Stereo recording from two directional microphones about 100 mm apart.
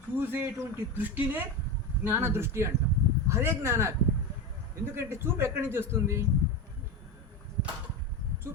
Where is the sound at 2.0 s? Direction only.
20° right (ahead or behind).